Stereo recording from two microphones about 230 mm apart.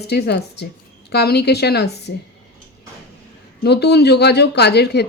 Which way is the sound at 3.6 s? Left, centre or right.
Left.